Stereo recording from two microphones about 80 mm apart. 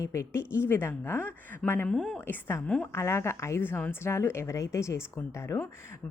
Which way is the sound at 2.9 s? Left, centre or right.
Left.